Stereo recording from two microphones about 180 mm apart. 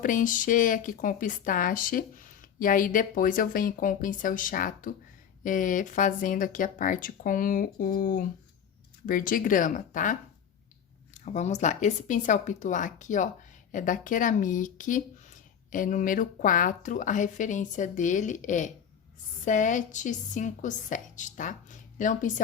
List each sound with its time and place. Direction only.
0.0 s speech: 45° left (ahead or behind)